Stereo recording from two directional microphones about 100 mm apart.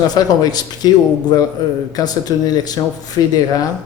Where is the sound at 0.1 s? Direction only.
40° left (ahead or behind).